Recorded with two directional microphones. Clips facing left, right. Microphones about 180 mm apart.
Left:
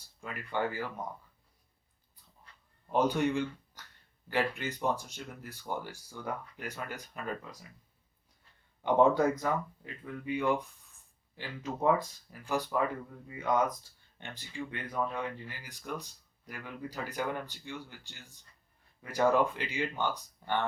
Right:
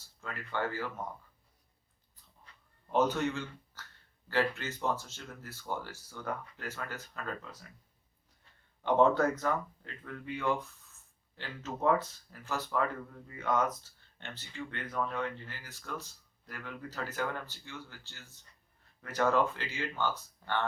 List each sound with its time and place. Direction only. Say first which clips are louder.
0.2 s speech: left 2 dB; 15° left (ahead or behind)
2.9 s speech: left 1 dB; 15° left (ahead or behind)
8.8 s speech: left 1 dB; 10° left (ahead or behind)